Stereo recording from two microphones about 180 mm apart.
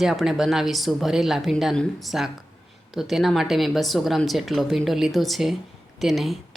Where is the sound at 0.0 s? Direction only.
Centre (ahead or behind).